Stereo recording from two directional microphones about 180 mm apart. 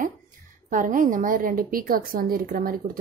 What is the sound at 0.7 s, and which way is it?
A woman's voice, 45° right (ahead or behind).